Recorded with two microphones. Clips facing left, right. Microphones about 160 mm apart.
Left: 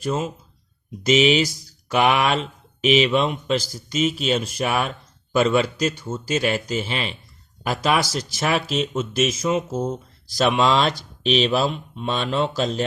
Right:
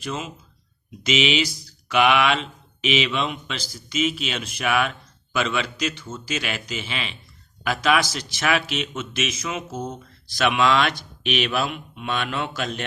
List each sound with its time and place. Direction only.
0.0 s speech: 40° left (ahead or behind)